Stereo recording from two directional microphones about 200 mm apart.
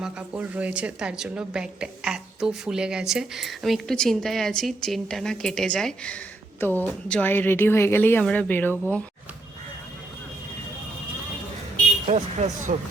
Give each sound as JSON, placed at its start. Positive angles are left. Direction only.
{"t": 0.0, "sound": "a woman's voice", "side_deg": -5}
{"t": 12.0, "sound": "speech", "side_deg": -35}